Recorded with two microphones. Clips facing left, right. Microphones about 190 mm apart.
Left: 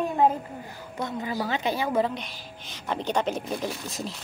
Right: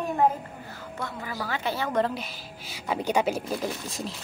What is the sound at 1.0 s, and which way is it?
A woman's voice, 20° left (ahead or behind).